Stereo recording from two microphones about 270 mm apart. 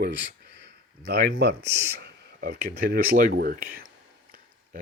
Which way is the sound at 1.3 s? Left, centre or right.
Right.